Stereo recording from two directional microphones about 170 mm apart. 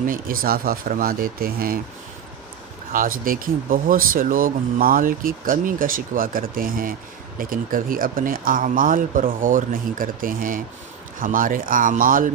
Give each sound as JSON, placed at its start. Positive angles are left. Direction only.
{"t": 0.0, "sound": "speech", "side_deg": -55}
{"t": 2.9, "sound": "speech", "side_deg": -55}